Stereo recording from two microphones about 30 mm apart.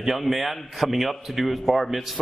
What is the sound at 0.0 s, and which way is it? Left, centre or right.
A man's voice, centre.